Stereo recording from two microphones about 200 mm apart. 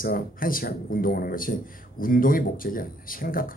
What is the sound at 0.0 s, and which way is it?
A man's voice, 45° left (ahead or behind).